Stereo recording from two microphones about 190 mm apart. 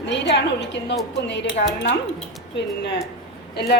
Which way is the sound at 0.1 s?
70° left (ahead or behind).